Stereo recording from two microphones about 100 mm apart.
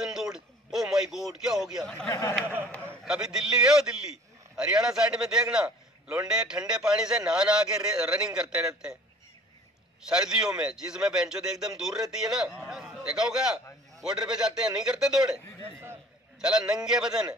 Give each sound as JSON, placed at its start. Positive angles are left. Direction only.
{"t": 0.0, "sound": "a sound", "side_deg": -5}
{"t": 2.0, "sound": "speech", "side_deg": 30}
{"t": 2.4, "sound": "a man's voice", "side_deg": -20}
{"t": 3.1, "sound": "a man's voice", "side_deg": -5}
{"t": 10.0, "sound": "a man's voice", "side_deg": -5}